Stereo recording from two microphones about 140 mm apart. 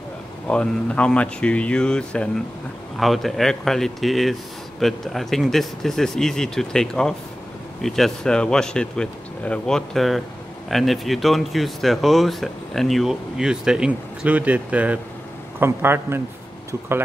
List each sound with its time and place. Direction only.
0.5 s a man's voice: 5° left (ahead or behind); by 16.2 s 15° right (ahead or behind)